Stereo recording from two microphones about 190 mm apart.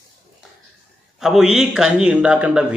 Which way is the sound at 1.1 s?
Centre (ahead or behind).